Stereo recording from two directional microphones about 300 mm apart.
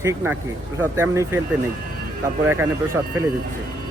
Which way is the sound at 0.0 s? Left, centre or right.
Centre.